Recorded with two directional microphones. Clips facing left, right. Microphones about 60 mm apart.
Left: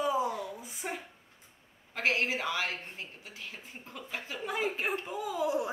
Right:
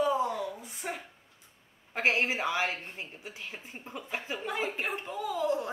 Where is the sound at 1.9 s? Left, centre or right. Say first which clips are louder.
Right 2 dB; right.